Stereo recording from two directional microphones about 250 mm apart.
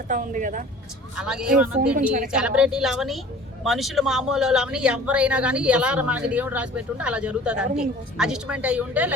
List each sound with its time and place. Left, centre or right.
0.1 s speech: right
1.1 s speech: centre
2.0 s speech: right
2.2 s speech: centre